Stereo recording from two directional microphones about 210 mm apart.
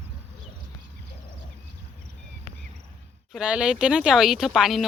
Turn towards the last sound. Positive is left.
turn(degrees=0)  # may be behind; listen again after turning